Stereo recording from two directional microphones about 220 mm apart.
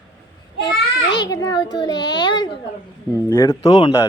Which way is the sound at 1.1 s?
20° left (ahead or behind).